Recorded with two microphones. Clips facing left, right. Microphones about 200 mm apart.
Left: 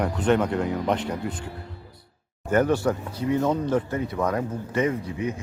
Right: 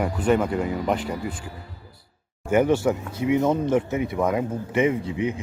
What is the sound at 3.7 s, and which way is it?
Speech, 10° right (ahead or behind).